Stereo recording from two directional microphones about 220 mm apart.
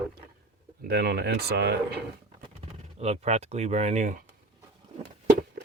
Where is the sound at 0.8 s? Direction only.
45° right (ahead or behind).